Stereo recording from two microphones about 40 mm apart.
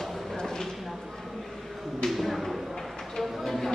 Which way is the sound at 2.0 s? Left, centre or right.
Centre.